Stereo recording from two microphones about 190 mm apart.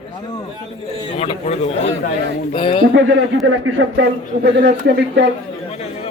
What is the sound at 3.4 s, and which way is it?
Speech, 85° right.